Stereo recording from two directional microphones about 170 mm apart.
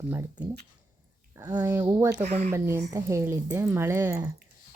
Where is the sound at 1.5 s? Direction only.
20° right (ahead or behind).